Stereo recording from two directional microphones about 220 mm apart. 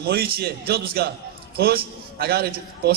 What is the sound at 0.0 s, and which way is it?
A man's voice, 45° right (ahead or behind).